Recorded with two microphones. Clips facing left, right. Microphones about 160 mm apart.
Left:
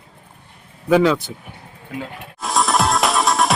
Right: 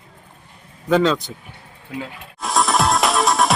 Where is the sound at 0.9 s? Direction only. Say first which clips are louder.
Left 2 dB; 10° left (ahead or behind).